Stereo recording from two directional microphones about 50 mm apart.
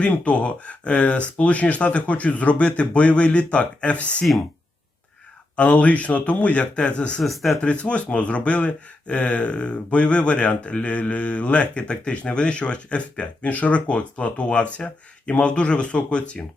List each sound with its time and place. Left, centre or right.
0.0 s speech: left
5.5 s speech: left
7.2 s speech: centre
7.6 s speech: left